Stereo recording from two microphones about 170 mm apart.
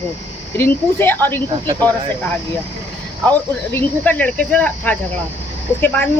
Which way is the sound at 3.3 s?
10° left (ahead or behind).